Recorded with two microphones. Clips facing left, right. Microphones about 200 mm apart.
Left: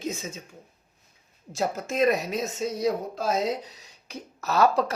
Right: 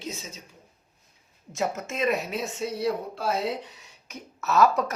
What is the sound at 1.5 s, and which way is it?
Speech, 35° left (ahead or behind).